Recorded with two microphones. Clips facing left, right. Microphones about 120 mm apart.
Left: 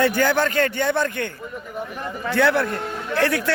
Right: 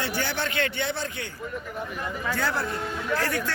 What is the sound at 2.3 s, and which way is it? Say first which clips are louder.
A man's voice: left 10 dB; 70° left (ahead or behind).